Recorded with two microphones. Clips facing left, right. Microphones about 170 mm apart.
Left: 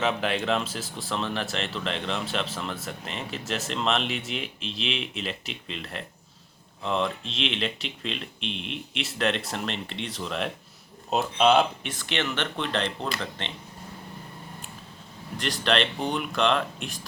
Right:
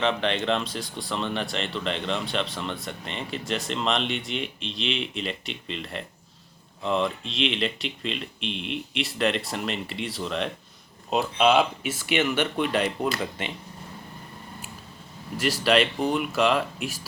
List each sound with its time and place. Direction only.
0.0 s speech: 5° left (ahead or behind); by 13.5 s 10° right (ahead or behind)
15.4 s speech: 5° right (ahead or behind)